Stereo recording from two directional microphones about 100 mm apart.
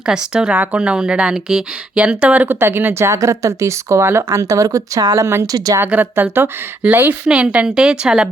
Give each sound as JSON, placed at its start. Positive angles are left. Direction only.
{"t": 0.0, "sound": "speech", "side_deg": -10}
{"t": 5.5, "sound": "speech", "side_deg": -40}
{"t": 5.8, "sound": "speech", "side_deg": -20}
{"t": 7.3, "sound": "a woman's voice", "side_deg": -10}